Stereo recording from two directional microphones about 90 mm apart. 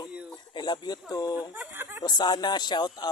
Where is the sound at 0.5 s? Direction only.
55° left (ahead or behind).